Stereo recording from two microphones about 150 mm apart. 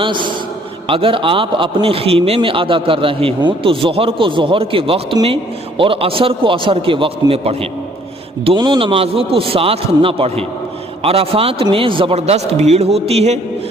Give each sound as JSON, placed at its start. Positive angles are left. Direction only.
{"t": 0.0, "sound": "a man's voice", "side_deg": -30}
{"t": 8.4, "sound": "a man's voice", "side_deg": -30}